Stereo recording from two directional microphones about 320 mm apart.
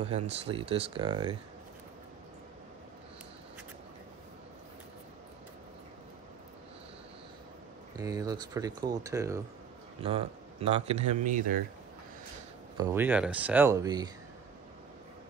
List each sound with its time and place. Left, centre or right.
0.3 s speech: centre
8.0 s speech: centre
12.7 s speech: centre